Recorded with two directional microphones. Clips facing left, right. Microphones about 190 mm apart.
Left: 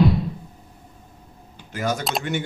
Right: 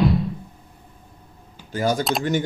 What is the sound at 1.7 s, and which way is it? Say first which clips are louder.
Speech: right 4 dB; 35° right (ahead or behind).